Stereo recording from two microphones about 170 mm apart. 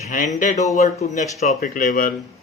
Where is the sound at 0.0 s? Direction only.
50° left (ahead or behind).